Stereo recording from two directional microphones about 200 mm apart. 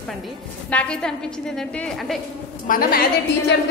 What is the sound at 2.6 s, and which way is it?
Speech, 45° left (ahead or behind).